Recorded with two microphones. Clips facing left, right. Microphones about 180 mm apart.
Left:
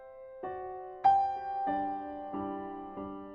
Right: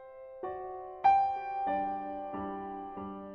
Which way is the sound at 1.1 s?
5° right (ahead or behind).